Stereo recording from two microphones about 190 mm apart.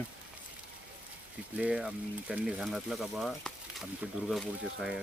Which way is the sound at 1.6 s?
5° right (ahead or behind).